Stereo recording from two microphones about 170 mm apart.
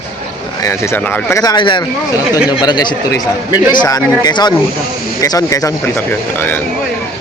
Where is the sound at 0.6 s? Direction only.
15° left (ahead or behind).